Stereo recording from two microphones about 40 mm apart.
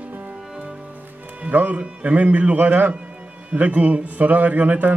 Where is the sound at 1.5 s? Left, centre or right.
Right.